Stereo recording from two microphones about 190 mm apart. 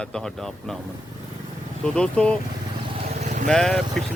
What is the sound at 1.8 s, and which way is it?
Speech, 5° left (ahead or behind).